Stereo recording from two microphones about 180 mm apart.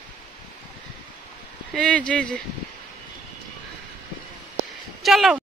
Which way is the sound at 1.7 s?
5° left (ahead or behind).